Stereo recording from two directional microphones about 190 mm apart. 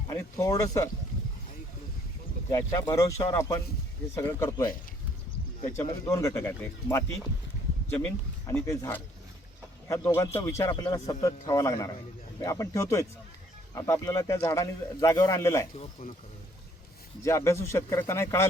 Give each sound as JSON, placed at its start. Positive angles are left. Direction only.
{"t": 0.1, "sound": "a man's voice", "side_deg": 15}
{"t": 2.5, "sound": "a man's voice", "side_deg": 15}
{"t": 6.1, "sound": "a man's voice", "side_deg": 15}
{"t": 15.8, "sound": "speech", "side_deg": 35}
{"t": 17.2, "sound": "a man's voice", "side_deg": 15}